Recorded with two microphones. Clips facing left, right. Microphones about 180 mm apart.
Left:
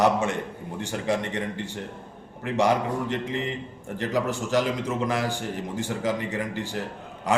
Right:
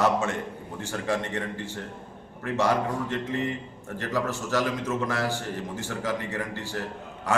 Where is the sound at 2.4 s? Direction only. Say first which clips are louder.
Left 2 dB; 15° left (ahead or behind).